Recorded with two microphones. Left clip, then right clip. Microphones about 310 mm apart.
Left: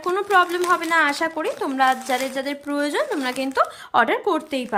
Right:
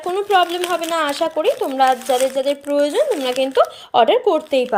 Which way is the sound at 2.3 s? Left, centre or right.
Centre.